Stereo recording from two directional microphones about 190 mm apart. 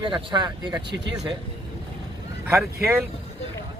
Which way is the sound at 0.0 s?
25° right (ahead or behind).